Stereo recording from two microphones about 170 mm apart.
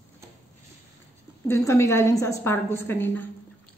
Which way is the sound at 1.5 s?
15° left (ahead or behind).